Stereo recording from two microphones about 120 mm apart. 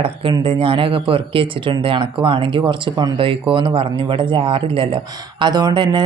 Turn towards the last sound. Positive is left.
turn(degrees=-40)  # may be behind; listen again after turning